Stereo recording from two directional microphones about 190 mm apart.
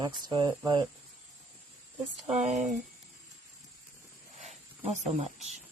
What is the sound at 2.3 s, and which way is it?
Speech, 40° right (ahead or behind).